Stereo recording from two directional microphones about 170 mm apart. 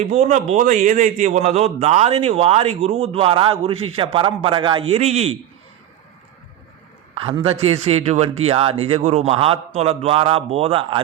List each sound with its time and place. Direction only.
0.0 s a man's voice: 40° right (ahead or behind)
7.3 s a man's voice: 30° right (ahead or behind)